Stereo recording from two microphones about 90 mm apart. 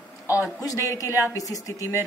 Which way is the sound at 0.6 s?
40° left (ahead or behind).